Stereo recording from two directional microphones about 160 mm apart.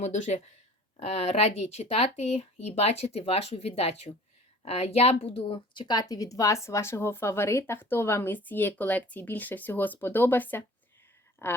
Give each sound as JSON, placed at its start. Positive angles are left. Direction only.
{"t": 0.0, "sound": "a woman's voice", "side_deg": 45}